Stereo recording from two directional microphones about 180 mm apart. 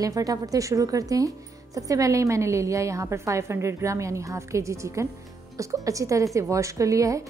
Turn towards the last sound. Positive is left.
turn(degrees=-20)  # may be behind; listen again after turning